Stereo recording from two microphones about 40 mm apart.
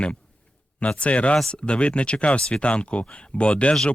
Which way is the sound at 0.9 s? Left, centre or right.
Left.